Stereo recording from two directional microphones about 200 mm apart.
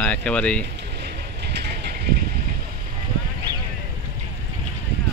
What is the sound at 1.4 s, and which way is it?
Mechanisms, 55° right (ahead or behind).